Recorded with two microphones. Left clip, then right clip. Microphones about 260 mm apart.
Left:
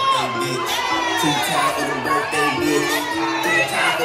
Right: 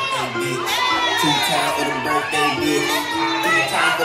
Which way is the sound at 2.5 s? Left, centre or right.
Right.